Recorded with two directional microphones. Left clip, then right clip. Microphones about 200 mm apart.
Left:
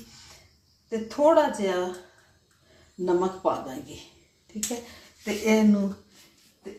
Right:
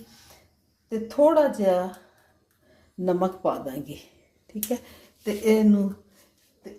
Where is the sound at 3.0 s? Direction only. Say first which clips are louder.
Even; 55° right (ahead or behind).